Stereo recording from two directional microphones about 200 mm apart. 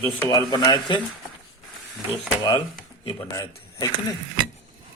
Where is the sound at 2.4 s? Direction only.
20° left (ahead or behind).